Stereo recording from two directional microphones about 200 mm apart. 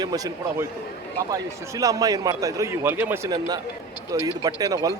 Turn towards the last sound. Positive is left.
turn(degrees=-20)  # may be behind; listen again after turning